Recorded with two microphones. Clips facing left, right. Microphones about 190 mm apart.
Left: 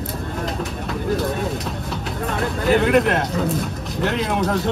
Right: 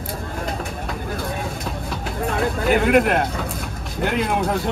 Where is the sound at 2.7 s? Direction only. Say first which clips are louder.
Left 1 dB; 5° right (ahead or behind).